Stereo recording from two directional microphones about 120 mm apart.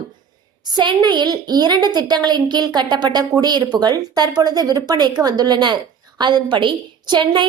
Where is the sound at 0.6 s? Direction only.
35° right (ahead or behind).